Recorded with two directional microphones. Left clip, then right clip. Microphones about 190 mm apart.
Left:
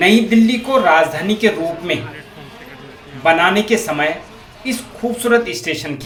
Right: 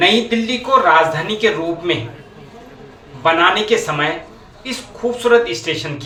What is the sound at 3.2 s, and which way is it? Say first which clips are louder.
Speech: even; 50° left (ahead or behind).